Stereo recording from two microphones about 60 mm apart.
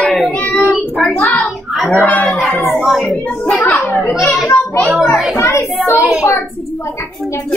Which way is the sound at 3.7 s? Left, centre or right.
Left.